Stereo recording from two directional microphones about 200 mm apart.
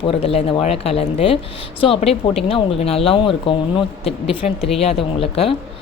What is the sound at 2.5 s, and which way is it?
Speech, 30° left (ahead or behind).